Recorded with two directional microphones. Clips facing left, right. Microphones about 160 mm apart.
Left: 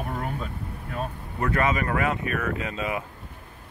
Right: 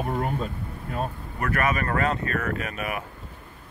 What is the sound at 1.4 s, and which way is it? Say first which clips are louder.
Speech: left 1 dB; 20° left (ahead or behind).